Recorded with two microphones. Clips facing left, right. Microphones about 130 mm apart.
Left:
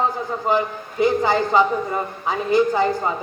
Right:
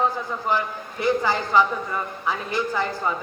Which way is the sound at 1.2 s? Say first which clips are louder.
Left 3 dB; 30° left (ahead or behind).